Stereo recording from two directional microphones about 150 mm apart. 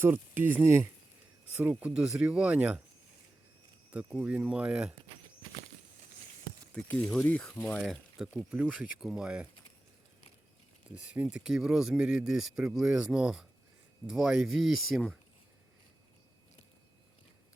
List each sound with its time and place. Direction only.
0.0 s speech: 15° right (ahead or behind)
3.9 s speech: 10° right (ahead or behind)
5.4 s a sound: 35° right (ahead or behind)
6.7 s speech: 5° left (ahead or behind)
7.8 s speech: 5° right (ahead or behind)
10.9 s speech: 10° right (ahead or behind)